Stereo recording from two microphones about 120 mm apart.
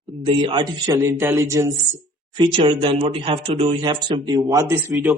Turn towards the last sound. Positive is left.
turn(degrees=-20)  # may be behind; listen again after turning